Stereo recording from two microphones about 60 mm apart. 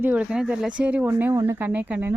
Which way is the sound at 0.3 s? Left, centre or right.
Centre.